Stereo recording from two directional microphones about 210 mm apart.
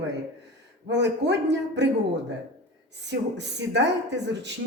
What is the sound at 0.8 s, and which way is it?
Speech, 55° right (ahead or behind).